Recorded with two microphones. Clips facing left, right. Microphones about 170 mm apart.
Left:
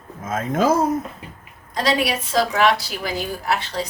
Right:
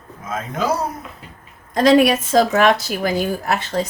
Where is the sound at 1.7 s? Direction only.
50° right (ahead or behind).